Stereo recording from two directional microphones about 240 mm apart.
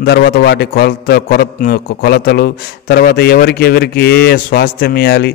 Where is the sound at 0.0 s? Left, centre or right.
Left.